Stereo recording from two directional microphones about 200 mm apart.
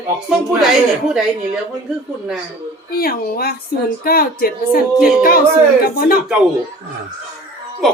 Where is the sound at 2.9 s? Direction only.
50° left (ahead or behind).